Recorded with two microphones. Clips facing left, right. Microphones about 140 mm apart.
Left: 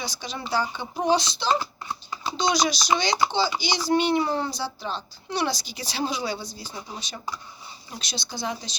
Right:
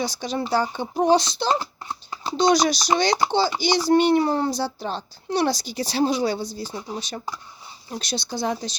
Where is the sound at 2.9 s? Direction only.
55° right (ahead or behind).